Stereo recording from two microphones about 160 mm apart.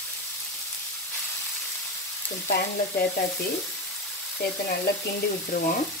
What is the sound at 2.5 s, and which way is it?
Frying, 90° left.